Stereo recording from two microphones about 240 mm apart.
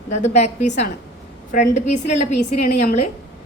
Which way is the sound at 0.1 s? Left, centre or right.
Left.